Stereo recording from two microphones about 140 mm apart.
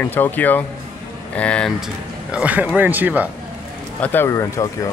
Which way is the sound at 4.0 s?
15° left (ahead or behind).